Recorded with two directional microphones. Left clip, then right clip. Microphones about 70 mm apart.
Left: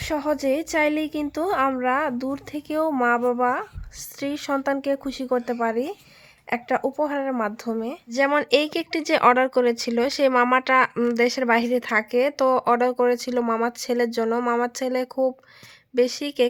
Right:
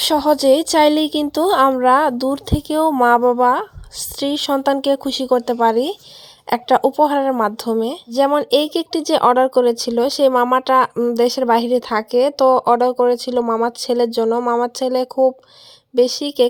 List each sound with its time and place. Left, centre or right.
0.0 s speech: right
3.0 s speech: right
3.4 s speech: right
4.7 s speech: right
6.5 s speech: right
7.4 s speech: right
8.4 s speech: right
13.4 s speech: right
13.7 s speech: right
14.3 s speech: right
14.6 s speech: right